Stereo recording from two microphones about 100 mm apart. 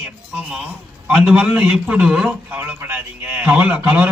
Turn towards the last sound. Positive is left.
turn(degrees=-15)  # may be behind; listen again after turning